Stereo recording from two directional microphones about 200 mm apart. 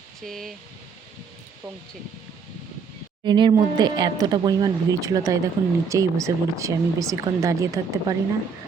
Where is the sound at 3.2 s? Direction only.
20° right (ahead or behind).